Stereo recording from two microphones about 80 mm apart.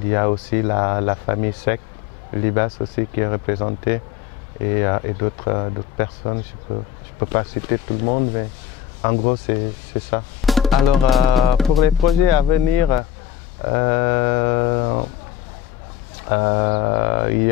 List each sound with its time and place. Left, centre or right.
0.1 s speech: left
10.4 s speech: centre
13.6 s speech: left
16.3 s speech: centre